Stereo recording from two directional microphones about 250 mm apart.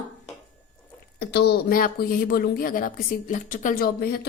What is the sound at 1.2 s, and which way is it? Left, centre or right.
A woman's voice, left.